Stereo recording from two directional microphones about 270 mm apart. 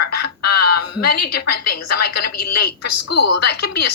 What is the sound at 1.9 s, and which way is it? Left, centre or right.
Speech, left.